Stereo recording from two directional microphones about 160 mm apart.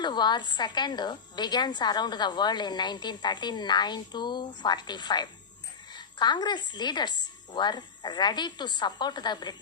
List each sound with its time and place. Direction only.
0.0 s a woman's voice: 25° left (ahead or behind)